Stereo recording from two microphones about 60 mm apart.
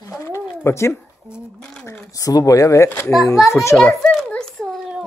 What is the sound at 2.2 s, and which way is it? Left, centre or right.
A child's voice, left.